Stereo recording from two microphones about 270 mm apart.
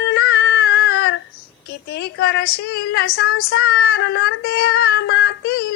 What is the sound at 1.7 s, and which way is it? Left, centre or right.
A woman's voice, left.